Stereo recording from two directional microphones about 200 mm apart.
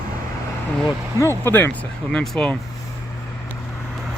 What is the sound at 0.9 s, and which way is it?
Speech, 15° left (ahead or behind).